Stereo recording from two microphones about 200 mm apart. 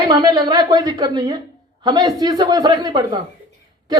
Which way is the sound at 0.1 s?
20° right (ahead or behind).